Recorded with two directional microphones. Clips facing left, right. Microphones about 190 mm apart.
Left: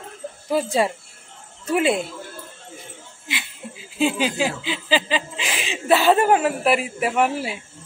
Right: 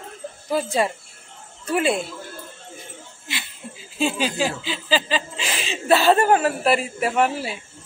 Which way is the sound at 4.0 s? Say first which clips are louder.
Left 2 dB; 20° left (ahead or behind).